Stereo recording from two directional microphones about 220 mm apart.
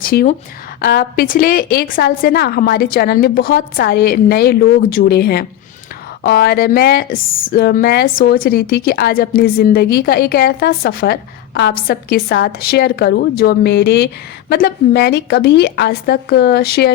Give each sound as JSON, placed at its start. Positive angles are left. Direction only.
{"t": 0.0, "sound": "a woman's voice", "side_deg": 40}